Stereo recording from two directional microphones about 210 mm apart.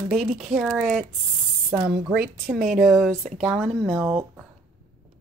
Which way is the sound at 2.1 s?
Centre (ahead or behind).